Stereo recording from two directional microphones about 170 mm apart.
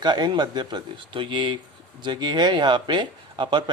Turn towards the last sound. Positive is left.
turn(degrees=-30)  # may be behind; listen again after turning